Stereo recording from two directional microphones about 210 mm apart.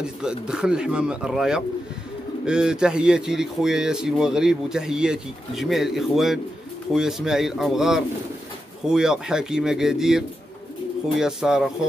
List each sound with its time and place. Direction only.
0.0 s speech: 5° right (ahead or behind)